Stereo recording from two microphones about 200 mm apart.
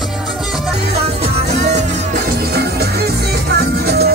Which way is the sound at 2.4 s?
50° right (ahead or behind).